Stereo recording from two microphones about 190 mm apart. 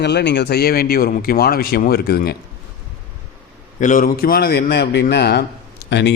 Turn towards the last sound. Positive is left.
turn(degrees=65)  # may be behind; listen again after turning